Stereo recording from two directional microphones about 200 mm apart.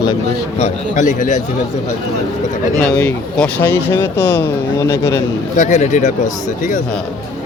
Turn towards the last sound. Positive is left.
turn(degrees=35)  # may be behind; listen again after turning